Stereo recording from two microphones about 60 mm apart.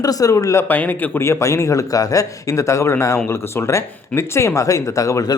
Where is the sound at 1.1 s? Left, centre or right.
Left.